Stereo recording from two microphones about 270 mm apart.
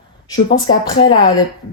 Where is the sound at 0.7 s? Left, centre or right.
Centre.